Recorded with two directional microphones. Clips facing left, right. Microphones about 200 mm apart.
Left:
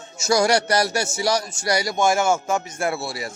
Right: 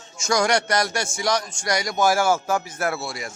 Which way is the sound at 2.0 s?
25° left (ahead or behind).